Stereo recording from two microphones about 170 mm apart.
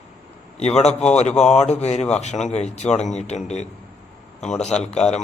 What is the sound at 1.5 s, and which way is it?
Speech, 40° left (ahead or behind).